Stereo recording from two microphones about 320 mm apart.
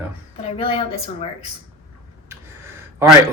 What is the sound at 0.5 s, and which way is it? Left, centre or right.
Speech, centre.